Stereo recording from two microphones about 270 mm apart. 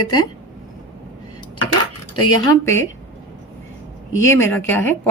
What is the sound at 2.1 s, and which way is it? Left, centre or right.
Speech, centre.